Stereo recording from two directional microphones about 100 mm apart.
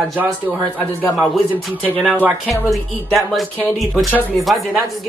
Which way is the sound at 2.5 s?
Centre (ahead or behind).